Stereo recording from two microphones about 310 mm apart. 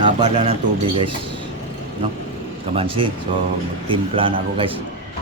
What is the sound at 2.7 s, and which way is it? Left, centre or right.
Speech, centre.